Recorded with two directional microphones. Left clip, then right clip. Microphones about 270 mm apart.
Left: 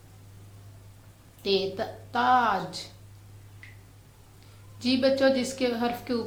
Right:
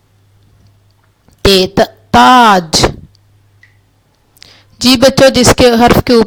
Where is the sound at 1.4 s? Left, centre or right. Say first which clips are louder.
Right 19 dB; right.